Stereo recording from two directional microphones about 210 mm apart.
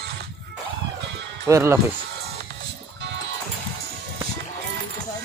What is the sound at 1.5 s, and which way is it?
Speech, 15° right (ahead or behind).